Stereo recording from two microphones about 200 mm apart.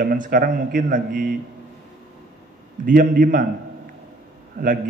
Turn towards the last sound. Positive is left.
turn(degrees=-50)  # may be behind; listen again after turning